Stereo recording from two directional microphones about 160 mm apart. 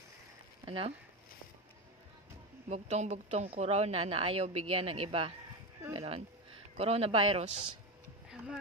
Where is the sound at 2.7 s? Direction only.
45° right (ahead or behind).